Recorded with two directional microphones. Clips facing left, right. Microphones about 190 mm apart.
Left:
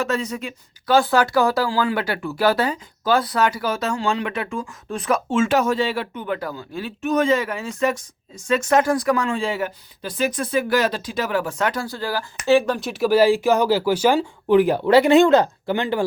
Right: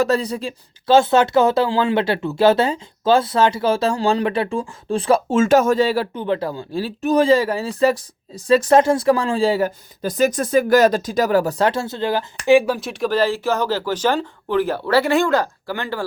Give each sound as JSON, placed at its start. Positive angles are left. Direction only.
{"t": 0.0, "sound": "speech", "side_deg": -35}
{"t": 12.5, "sound": "speech", "side_deg": -10}